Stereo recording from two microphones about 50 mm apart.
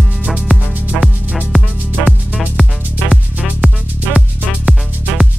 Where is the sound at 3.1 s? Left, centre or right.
Right.